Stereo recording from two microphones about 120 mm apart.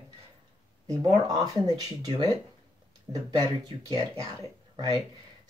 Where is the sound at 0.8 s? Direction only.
30° right (ahead or behind).